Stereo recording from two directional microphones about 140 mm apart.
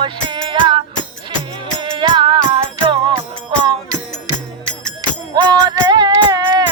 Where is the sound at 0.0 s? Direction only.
35° right (ahead or behind).